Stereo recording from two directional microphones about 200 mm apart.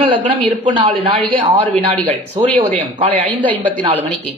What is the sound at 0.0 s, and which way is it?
A man's voice, 25° right (ahead or behind).